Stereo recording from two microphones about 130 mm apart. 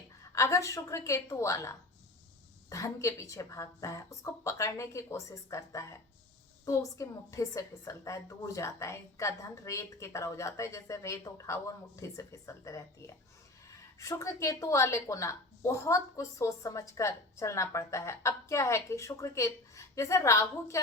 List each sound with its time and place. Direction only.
0.2 s a woman's voice: 20° left (ahead or behind)
14.0 s a woman's voice: 25° left (ahead or behind)